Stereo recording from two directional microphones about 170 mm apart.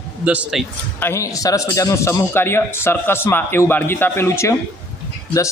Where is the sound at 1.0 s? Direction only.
15° left (ahead or behind).